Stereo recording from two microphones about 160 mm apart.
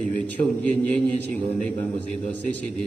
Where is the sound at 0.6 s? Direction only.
10° left (ahead or behind).